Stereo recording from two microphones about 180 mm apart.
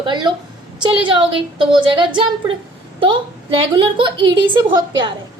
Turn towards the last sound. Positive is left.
turn(degrees=-25)  # may be behind; listen again after turning